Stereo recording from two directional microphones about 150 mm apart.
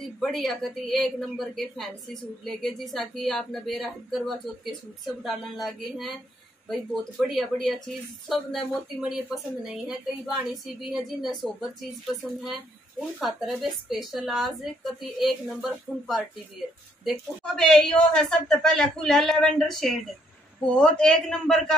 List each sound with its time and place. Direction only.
0.2 s speech: centre (ahead or behind)
9.7 s speech: 5° right (ahead or behind)